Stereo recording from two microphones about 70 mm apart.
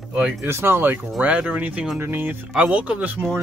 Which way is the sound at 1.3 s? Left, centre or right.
Centre.